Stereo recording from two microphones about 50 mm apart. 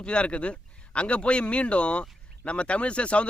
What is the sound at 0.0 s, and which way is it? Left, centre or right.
Speech, left.